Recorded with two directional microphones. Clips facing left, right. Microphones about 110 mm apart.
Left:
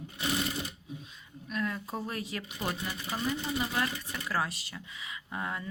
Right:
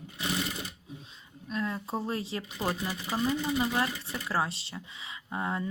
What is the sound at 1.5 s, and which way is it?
Speech, 25° right (ahead or behind).